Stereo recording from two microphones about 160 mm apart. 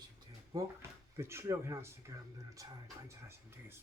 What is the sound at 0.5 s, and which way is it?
Speech, 20° right (ahead or behind).